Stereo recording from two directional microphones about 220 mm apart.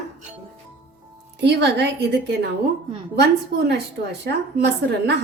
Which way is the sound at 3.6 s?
50° right (ahead or behind).